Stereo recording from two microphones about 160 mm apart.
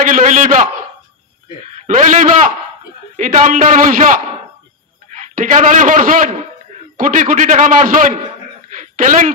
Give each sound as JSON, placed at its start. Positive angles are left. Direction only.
{"t": 0.0, "sound": "a man's voice", "side_deg": -55}
{"t": 2.0, "sound": "a man's voice", "side_deg": -55}
{"t": 5.3, "sound": "a man's voice", "side_deg": -55}
{"t": 8.6, "sound": "a sound", "side_deg": -55}